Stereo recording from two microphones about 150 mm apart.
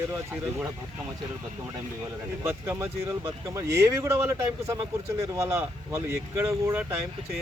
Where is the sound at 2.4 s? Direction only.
15° right (ahead or behind).